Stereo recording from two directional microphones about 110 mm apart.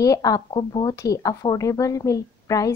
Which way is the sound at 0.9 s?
30° left (ahead or behind).